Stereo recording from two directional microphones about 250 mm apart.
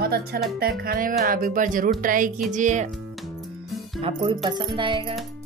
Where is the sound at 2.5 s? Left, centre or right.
Right.